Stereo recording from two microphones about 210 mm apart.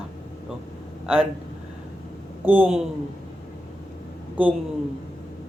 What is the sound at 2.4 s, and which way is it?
Speech, 10° right (ahead or behind).